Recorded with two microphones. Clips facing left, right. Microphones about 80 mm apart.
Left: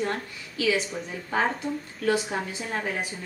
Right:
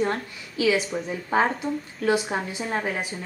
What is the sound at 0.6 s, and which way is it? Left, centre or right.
A woman's voice, centre.